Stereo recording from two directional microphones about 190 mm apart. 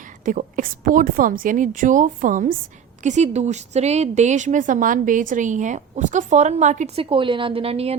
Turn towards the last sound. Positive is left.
turn(degrees=-30)  # may be behind; listen again after turning